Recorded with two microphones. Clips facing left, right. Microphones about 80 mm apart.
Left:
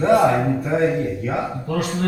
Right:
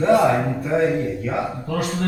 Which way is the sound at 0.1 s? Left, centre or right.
Centre.